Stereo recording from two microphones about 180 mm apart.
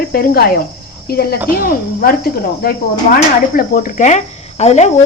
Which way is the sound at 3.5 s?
50° left (ahead or behind).